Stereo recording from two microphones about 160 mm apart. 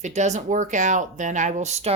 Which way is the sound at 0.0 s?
45° right (ahead or behind).